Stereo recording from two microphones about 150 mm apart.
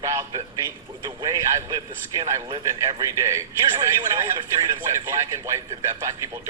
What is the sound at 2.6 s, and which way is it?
A man's voice, 20° right (ahead or behind).